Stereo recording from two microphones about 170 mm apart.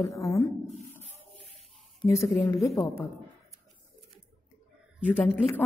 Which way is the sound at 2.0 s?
15° left (ahead or behind).